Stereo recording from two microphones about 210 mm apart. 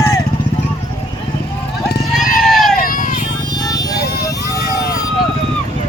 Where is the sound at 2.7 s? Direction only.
40° left (ahead or behind).